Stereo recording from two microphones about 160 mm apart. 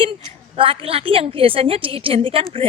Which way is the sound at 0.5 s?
35° right (ahead or behind).